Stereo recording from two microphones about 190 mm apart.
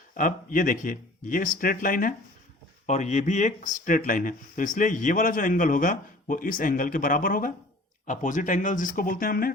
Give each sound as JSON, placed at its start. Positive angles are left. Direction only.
{"t": 0.1, "sound": "speech", "side_deg": 45}